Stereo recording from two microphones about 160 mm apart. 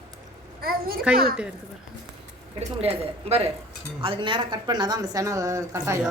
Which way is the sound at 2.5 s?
40° right (ahead or behind).